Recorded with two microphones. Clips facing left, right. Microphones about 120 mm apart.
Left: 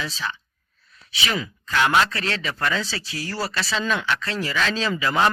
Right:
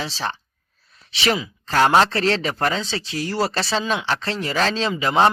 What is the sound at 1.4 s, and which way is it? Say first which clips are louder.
Speech: right 2 dB; 35° right (ahead or behind).